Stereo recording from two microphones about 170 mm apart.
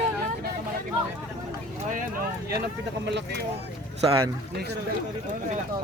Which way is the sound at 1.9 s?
55° right (ahead or behind).